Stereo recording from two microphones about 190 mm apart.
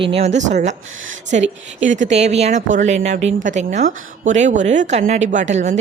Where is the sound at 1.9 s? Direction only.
40° right (ahead or behind).